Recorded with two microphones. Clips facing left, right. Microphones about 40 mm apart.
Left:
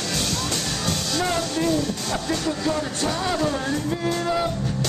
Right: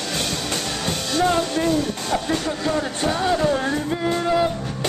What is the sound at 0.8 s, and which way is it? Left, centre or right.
Music, right.